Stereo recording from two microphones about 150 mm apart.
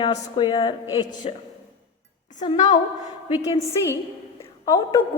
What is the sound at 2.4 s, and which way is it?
Speech, 45° left (ahead or behind).